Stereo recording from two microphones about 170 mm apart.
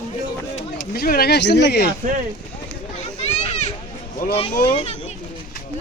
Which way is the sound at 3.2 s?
40° left (ahead or behind).